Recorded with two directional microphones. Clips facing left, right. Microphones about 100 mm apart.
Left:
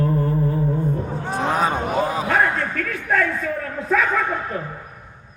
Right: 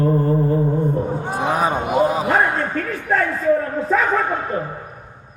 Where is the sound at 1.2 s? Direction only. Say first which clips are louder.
Left 1 dB; 15° right (ahead or behind); by 3.3 s 30° right (ahead or behind).